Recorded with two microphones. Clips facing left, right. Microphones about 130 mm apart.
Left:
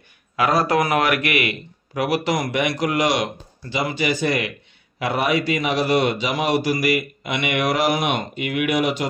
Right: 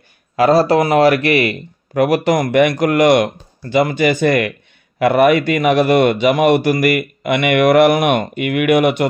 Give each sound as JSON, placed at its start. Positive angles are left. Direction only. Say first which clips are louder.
{"t": 0.4, "sound": "a man's voice", "louder": "right 7 dB", "side_deg": -30}